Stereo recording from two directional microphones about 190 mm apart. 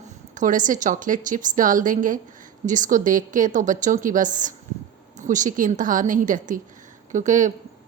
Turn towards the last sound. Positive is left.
turn(degrees=-40)  # may be behind; listen again after turning